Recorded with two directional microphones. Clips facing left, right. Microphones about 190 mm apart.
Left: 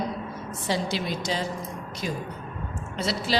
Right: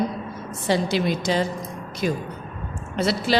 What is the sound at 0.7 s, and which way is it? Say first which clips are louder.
A woman's voice: right 6 dB; 60° right (ahead or behind).